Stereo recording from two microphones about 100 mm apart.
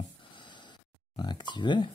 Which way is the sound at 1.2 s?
50° left (ahead or behind).